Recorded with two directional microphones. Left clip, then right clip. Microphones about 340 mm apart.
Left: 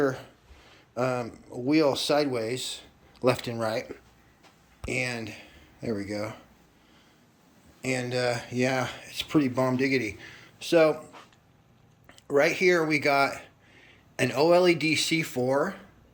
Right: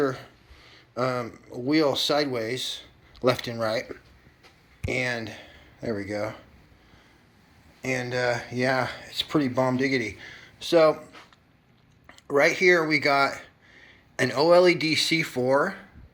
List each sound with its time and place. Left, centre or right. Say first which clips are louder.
0.0 s speech: right 1 dB; centre
7.8 s speech: right 1 dB; centre